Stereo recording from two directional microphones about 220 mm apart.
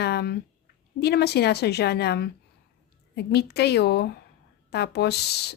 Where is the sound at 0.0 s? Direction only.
45° left (ahead or behind).